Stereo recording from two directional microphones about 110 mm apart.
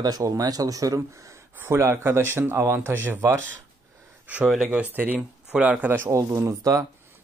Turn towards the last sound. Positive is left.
turn(degrees=-30)  # may be behind; listen again after turning